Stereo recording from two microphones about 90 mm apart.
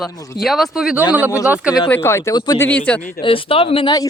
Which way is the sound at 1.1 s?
20° right (ahead or behind).